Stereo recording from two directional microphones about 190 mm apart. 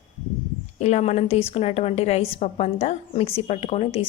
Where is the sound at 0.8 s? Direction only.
35° left (ahead or behind).